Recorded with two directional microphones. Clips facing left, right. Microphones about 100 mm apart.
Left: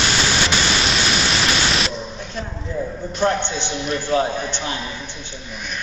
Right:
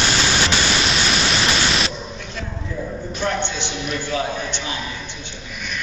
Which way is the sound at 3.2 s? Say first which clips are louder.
Left 4 dB; 40° left (ahead or behind).